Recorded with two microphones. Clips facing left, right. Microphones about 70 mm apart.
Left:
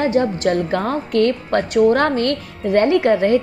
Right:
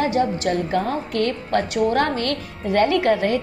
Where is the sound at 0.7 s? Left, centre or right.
Left.